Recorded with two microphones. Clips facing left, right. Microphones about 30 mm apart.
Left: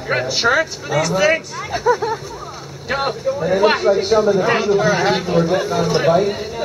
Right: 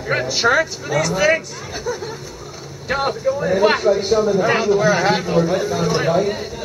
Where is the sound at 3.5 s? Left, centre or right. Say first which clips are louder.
Left 1 dB; centre.